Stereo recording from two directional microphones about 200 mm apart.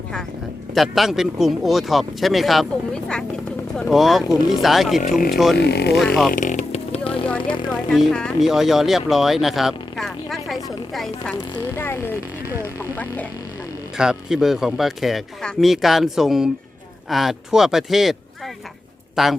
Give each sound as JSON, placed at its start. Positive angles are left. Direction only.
{"t": 0.7, "sound": "speech", "side_deg": 0}
{"t": 5.5, "sound": "speech", "side_deg": 55}
{"t": 6.3, "sound": "vehicle", "side_deg": 40}
{"t": 7.7, "sound": "speech", "side_deg": 0}
{"t": 11.5, "sound": "speech", "side_deg": 10}
{"t": 12.6, "sound": "hum", "side_deg": 10}
{"t": 13.9, "sound": "a man's voice", "side_deg": -5}